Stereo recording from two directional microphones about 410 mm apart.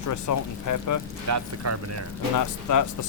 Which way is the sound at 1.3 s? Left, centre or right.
Right.